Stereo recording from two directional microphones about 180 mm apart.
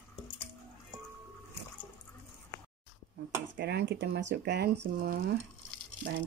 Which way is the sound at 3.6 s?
65° right (ahead or behind).